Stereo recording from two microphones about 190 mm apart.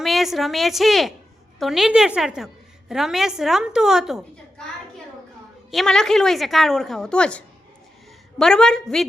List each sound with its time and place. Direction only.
0.0 s a woman's voice: centre (ahead or behind)
5.7 s a woman's voice: centre (ahead or behind)